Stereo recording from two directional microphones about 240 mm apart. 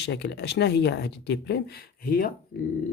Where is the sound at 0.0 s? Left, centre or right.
Left.